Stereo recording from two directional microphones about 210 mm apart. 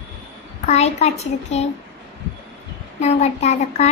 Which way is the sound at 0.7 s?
30° left (ahead or behind).